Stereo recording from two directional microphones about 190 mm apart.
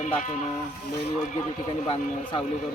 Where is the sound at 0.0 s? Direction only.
40° left (ahead or behind).